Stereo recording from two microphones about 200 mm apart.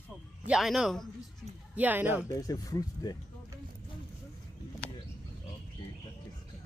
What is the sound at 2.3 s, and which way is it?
Speech, 15° left (ahead or behind).